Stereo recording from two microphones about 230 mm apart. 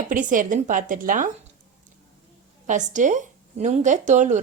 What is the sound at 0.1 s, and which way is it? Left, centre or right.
Speech, right.